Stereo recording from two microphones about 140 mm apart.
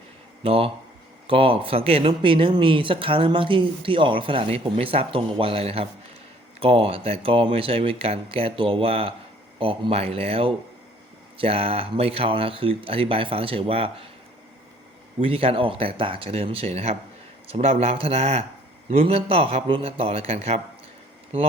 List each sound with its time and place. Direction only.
0.4 s a man's voice: 40° right (ahead or behind)
15.2 s a man's voice: 40° right (ahead or behind)